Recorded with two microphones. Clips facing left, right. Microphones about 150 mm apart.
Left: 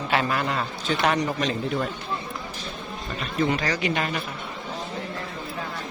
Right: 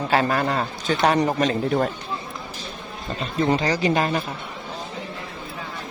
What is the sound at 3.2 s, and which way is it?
Speech, 30° right (ahead or behind).